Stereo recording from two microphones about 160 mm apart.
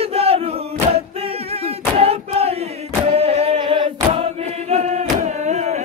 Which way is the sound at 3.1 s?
40° right (ahead or behind).